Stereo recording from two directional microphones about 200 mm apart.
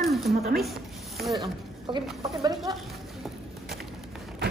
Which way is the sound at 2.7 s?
Centre (ahead or behind).